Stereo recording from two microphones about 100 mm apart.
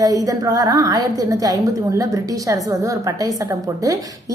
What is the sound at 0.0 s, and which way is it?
A woman's voice, 35° right (ahead or behind).